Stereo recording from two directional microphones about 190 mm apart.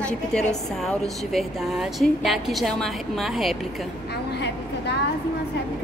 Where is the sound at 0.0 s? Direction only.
5° left (ahead or behind).